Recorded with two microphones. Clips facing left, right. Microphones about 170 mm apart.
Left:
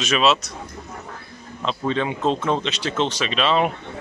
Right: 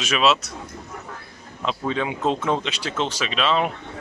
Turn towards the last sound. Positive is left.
turn(degrees=0)  # may be behind; listen again after turning